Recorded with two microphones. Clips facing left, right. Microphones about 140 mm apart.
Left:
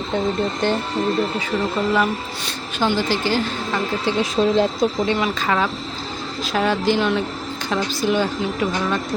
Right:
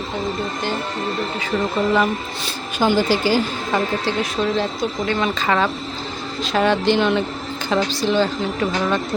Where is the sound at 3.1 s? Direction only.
10° right (ahead or behind).